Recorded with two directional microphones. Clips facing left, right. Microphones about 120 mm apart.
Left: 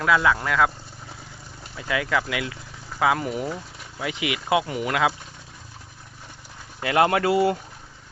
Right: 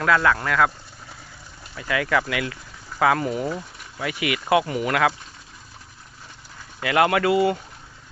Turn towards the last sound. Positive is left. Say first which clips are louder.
# right 1 dB
turn(degrees=40)  # may be behind; listen again after turning